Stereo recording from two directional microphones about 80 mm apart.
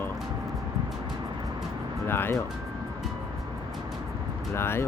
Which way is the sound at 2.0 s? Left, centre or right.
Left.